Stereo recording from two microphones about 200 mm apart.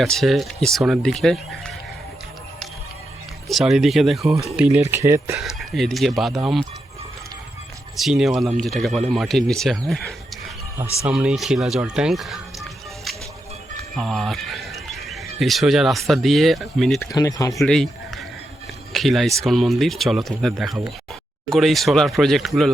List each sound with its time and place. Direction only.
0.0 s speech: centre (ahead or behind)
3.5 s speech: centre (ahead or behind)
4.9 s speech: 15° right (ahead or behind)
5.4 s speech: centre (ahead or behind)
7.9 s speech: centre (ahead or behind)
13.9 s speech: centre (ahead or behind)
17.0 s speech: 15° left (ahead or behind)
17.5 s speech: centre (ahead or behind)